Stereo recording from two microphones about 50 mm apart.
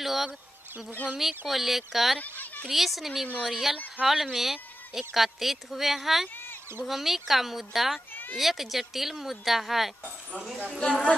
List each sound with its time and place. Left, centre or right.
0.0 s speech: centre
2.1 s a sound: left
2.7 s speech: centre
8.1 s a sound: left
8.4 s speech: centre
10.8 s speech: centre